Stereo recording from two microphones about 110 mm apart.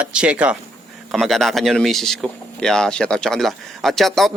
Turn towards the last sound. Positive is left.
turn(degrees=0)  # may be behind; listen again after turning